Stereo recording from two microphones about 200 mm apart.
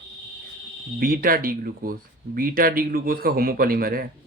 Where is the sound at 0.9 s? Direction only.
45° right (ahead or behind).